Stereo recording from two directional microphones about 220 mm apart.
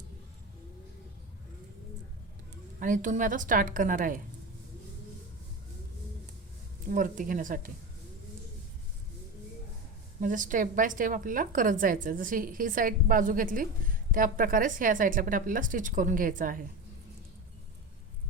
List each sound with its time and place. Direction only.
2.8 s a woman's voice: 35° right (ahead or behind)
6.8 s a woman's voice: 40° right (ahead or behind)
10.2 s a woman's voice: 35° right (ahead or behind)